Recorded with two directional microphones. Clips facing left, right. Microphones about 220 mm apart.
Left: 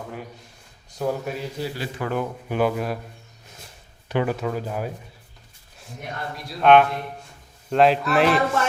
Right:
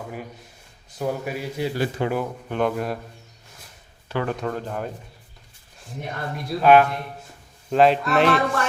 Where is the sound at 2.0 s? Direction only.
25° right (ahead or behind).